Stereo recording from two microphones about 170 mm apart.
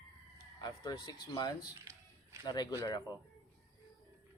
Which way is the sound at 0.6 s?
20° left (ahead or behind).